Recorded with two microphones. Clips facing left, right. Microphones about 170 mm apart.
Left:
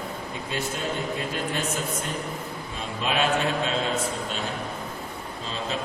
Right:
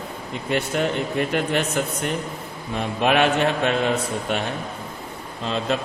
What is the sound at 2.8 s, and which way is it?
Speech, 65° right (ahead or behind).